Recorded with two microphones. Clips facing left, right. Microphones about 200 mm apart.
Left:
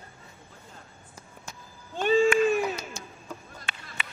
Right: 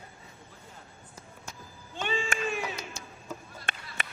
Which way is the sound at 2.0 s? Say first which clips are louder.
Left 11 dB; 40° left (ahead or behind).